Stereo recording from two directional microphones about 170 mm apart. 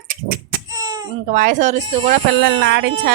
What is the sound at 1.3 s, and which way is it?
Speech, 50° right (ahead or behind).